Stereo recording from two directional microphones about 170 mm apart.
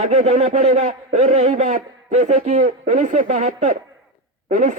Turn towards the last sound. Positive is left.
turn(degrees=-50)  # may be behind; listen again after turning